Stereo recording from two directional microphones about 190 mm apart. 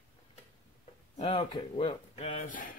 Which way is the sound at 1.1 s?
30° left (ahead or behind).